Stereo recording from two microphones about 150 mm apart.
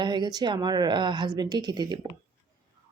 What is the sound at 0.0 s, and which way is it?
A woman's voice, 30° right (ahead or behind).